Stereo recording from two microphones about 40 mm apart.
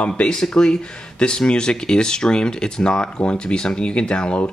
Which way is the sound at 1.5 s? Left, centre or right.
Left.